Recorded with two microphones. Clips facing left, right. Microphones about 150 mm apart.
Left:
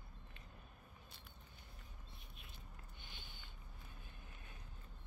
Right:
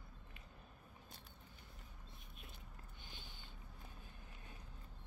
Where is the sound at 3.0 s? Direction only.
35° right (ahead or behind).